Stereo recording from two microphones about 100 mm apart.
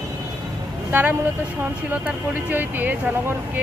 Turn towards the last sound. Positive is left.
turn(degrees=-20)  # may be behind; listen again after turning